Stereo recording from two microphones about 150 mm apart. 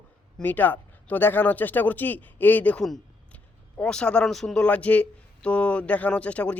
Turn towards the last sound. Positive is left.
turn(degrees=10)  # may be behind; listen again after turning